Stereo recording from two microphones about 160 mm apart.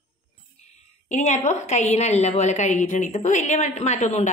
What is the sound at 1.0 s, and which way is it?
Speech, 50° left (ahead or behind).